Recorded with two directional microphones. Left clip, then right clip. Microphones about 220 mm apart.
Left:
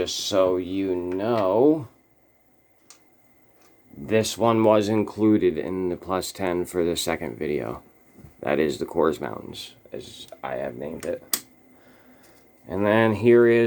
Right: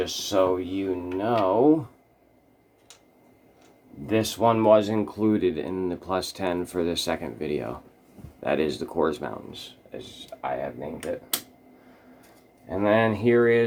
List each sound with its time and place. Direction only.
0.0 s speech: 40° left (ahead or behind)
4.0 s speech: 40° left (ahead or behind)
12.6 s speech: 45° left (ahead or behind)